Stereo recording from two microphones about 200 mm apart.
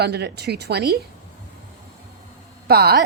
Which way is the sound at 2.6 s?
50° right (ahead or behind).